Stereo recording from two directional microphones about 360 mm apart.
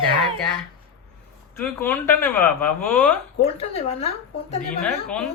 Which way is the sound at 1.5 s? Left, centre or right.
Centre.